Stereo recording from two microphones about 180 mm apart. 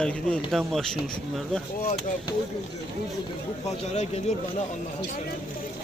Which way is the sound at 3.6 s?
40° left (ahead or behind).